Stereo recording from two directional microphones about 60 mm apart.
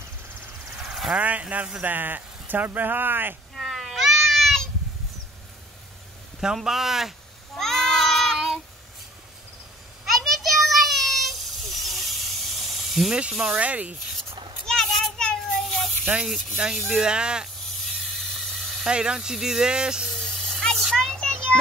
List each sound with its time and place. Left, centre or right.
0.8 s vehicle: centre
1.1 s speech: right
3.5 s cat: centre
6.4 s a sound: centre
10.0 s a sound: centre
13.1 s speech: centre
13.6 s speech: right
14.7 s child singing: centre
16.3 s speech: centre
17.0 s speech: centre
17.8 s snake: centre
18.9 s speech: centre
20.2 s snake: centre
20.9 s a sound: centre